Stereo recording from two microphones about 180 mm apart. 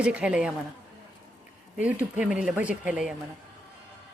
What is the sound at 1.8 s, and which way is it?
Speech, 5° right (ahead or behind).